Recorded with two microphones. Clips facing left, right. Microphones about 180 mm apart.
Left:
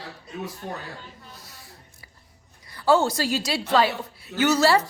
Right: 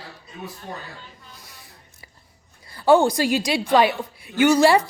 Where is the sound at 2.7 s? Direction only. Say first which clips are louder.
Right 3 dB; 25° right (ahead or behind).